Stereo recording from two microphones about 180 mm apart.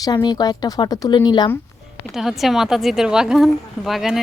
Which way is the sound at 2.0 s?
Centre (ahead or behind).